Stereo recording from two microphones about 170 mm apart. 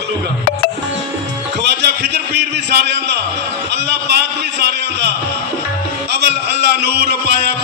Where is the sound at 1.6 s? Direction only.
75° right (ahead or behind).